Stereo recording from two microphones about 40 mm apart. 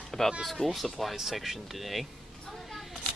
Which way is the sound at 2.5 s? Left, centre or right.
Centre.